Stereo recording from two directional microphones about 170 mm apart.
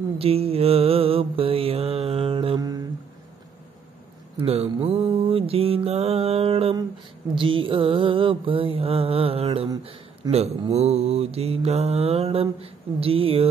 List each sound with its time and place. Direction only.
0.2 s mantra: 35° right (ahead or behind)
4.4 s mantra: 35° right (ahead or behind)